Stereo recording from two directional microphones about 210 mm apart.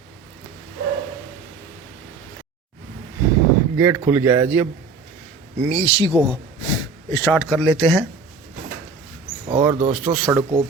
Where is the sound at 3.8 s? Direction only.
10° right (ahead or behind).